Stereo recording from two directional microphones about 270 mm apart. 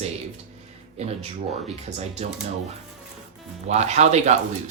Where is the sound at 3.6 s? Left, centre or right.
Right.